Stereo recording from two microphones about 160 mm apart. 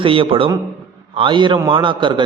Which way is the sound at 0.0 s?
35° right (ahead or behind).